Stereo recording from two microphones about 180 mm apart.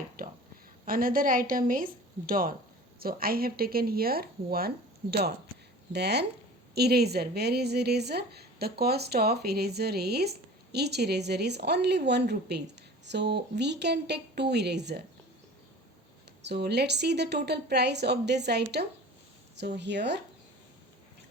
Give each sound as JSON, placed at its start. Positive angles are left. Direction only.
{"t": 0.2, "sound": "a sound", "side_deg": -55}
{"t": 0.9, "sound": "a woman's voice", "side_deg": -55}
{"t": 5.9, "sound": "a woman's voice", "side_deg": -65}
{"t": 16.4, "sound": "speech", "side_deg": -70}